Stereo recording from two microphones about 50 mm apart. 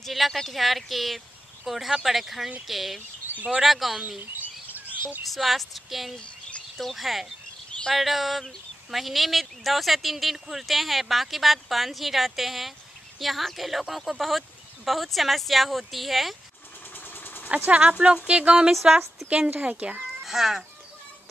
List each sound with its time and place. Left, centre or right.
0.0 s speech: centre
4.4 s chirp: right
5.3 s speech: centre
6.1 s bird: left
6.8 s speech: centre
16.9 s vehicle: left
17.6 s speech: right
20.2 s speech: centre